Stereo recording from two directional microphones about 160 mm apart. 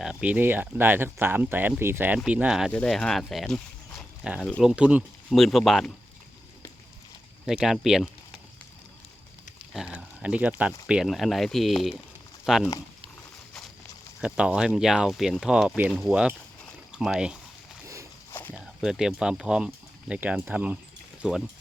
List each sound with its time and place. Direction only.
0.0 s speech: 5° right (ahead or behind)
7.4 s speech: 5° right (ahead or behind)
9.7 s speech: 5° right (ahead or behind)
14.2 s speech: 5° right (ahead or behind)
18.3 s walk: 15° left (ahead or behind)
18.5 s speech: centre (ahead or behind)